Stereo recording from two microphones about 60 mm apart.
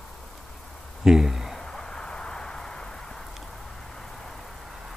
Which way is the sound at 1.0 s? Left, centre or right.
Centre.